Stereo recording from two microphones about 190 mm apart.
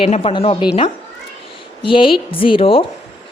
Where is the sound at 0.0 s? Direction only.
30° left (ahead or behind).